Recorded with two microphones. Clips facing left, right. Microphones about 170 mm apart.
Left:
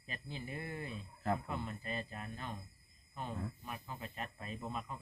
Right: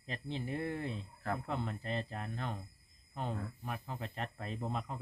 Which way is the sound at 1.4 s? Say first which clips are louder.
Right 3 dB; 70° right (ahead or behind).